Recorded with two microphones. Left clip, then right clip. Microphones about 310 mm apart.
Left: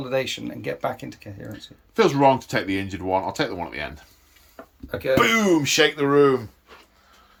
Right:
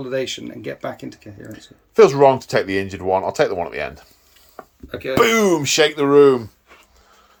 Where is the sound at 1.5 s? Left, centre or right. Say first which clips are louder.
Right 9 dB; centre.